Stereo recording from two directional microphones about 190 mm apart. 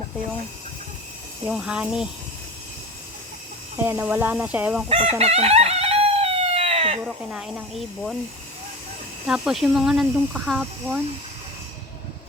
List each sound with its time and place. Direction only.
1.5 s speech: 5° right (ahead or behind)
3.8 s speech: 10° right (ahead or behind)
4.9 s chicken: 30° right (ahead or behind)
7.0 s speech: 5° right (ahead or behind)
9.2 s speech: 5° right (ahead or behind)